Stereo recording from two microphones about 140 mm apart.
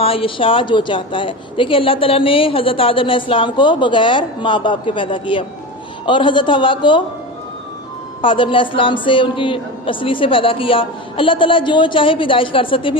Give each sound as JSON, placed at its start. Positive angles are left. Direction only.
{"t": 0.0, "sound": "a woman's voice", "side_deg": 40}
{"t": 8.2, "sound": "a woman's voice", "side_deg": 35}